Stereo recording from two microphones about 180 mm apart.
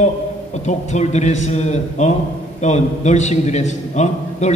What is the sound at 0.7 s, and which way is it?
A man's voice, 40° left (ahead or behind).